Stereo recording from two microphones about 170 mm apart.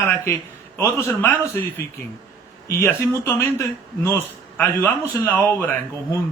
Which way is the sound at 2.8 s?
15° left (ahead or behind).